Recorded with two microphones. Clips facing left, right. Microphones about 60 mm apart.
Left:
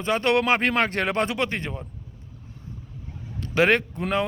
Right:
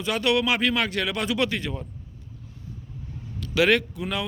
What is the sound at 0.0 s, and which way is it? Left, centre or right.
A man's voice, left.